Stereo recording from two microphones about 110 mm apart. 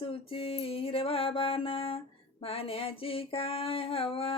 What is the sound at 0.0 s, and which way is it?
Music, 55° left (ahead or behind).